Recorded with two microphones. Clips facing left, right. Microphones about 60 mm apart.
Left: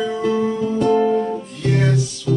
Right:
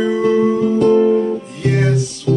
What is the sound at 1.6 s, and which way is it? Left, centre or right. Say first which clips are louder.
Music: right 2 dB; centre.